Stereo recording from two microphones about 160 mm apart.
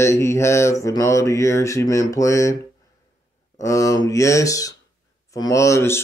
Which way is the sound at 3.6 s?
20° left (ahead or behind).